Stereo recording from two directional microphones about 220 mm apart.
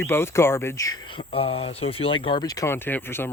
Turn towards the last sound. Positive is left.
turn(degrees=10)  # may be behind; listen again after turning